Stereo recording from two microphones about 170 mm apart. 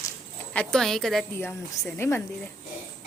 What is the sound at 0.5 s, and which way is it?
A woman's voice, centre (ahead or behind).